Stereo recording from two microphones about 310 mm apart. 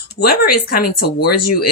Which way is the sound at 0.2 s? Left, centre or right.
Left.